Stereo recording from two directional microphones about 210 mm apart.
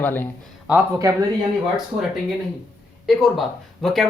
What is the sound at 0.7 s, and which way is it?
Speech, 10° right (ahead or behind).